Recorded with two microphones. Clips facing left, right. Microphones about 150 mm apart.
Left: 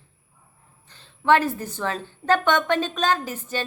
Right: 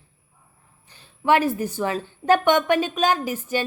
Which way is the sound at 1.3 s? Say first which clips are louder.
Even; 10° right (ahead or behind).